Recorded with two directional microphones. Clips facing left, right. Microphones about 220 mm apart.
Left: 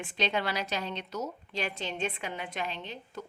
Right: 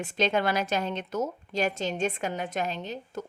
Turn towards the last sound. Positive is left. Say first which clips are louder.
# right 6 dB
turn(degrees=-45)  # may be behind; listen again after turning